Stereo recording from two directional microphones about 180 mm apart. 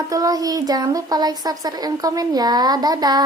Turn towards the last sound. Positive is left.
turn(degrees=-20)  # may be behind; listen again after turning